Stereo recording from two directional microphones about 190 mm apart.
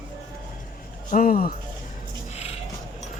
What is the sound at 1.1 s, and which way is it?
Speech, 50° left (ahead or behind).